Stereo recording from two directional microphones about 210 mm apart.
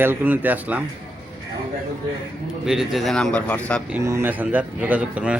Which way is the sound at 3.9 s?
15° right (ahead or behind).